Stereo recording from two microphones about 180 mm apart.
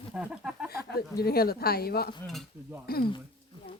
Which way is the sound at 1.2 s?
60° left (ahead or behind).